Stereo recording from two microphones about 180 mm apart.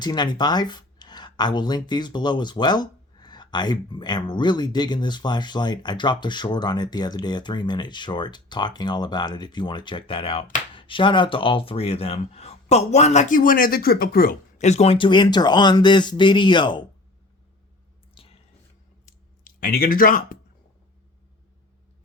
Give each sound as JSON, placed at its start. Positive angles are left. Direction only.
{"t": 0.0, "sound": "speech", "side_deg": 25}
{"t": 14.6, "sound": "speech", "side_deg": 40}
{"t": 18.1, "sound": "a sound", "side_deg": 30}
{"t": 19.0, "sound": "clicking", "side_deg": 50}